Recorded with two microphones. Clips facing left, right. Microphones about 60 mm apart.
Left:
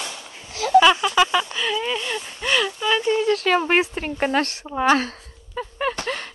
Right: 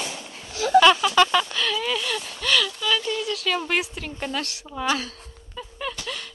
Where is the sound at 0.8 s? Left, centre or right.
Centre; by 4.7 s left.